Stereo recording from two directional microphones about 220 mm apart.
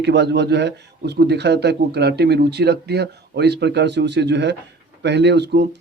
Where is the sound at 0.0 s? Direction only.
50° right (ahead or behind).